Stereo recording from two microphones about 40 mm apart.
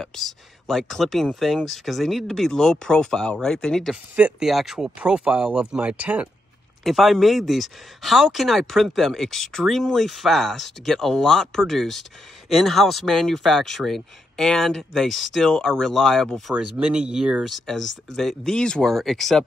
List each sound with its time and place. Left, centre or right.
0.0 s speech: centre
4.4 s speech: centre
4.7 s speech: right
5.9 s speech: right
6.8 s speech: centre
16.5 s speech: right
17.5 s speech: centre
18.9 s speech: centre